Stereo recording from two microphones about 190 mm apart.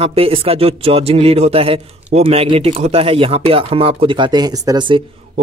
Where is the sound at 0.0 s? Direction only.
30° right (ahead or behind).